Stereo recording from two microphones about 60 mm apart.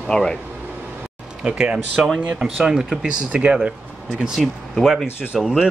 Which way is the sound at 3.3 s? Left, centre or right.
Right.